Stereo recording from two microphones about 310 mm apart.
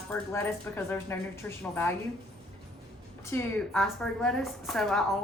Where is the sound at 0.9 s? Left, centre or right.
Centre.